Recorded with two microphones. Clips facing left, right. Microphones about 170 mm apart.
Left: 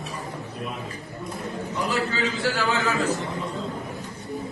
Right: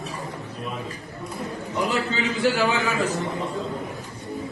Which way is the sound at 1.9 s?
20° right (ahead or behind).